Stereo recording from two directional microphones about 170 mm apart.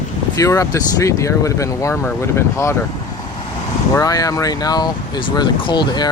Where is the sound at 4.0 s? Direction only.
20° left (ahead or behind).